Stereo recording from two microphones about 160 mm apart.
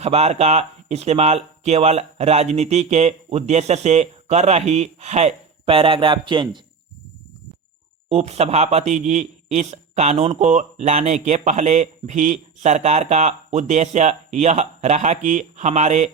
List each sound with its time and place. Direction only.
0.0 s a man's voice: 40° right (ahead or behind)
8.1 s a man's voice: 40° right (ahead or behind)